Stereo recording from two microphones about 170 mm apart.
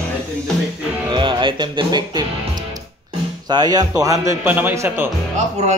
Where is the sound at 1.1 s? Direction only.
30° right (ahead or behind).